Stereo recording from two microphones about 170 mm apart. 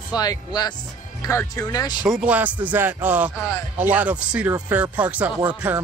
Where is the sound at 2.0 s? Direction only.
5° right (ahead or behind).